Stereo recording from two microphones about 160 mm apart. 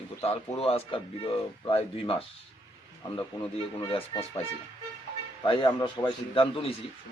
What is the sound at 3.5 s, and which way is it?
Speech, 35° left (ahead or behind).